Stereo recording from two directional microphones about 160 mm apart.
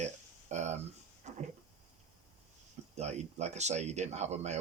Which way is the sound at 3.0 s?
45° right (ahead or behind).